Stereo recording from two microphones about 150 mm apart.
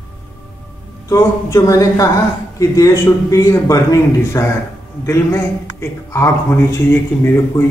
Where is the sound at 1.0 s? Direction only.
20° left (ahead or behind).